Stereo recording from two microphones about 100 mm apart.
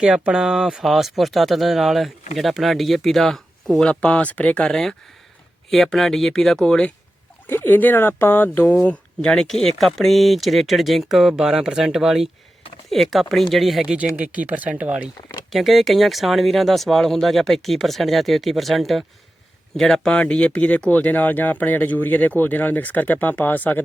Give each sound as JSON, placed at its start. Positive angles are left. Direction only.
{"t": 0.0, "sound": "speech", "side_deg": -10}
{"t": 7.4, "sound": "speech", "side_deg": 20}
{"t": 15.4, "sound": "speech", "side_deg": 0}